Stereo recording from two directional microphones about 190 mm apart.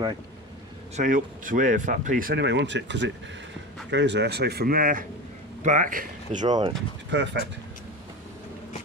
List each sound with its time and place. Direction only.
0.9 s speech: 45° right (ahead or behind)
6.4 s speech: 20° right (ahead or behind)
7.1 s speech: 65° right (ahead or behind)